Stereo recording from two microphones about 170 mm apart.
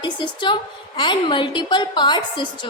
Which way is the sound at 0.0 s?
30° left (ahead or behind).